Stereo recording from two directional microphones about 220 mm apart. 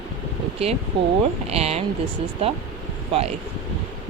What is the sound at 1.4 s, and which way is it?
Speech, 30° right (ahead or behind).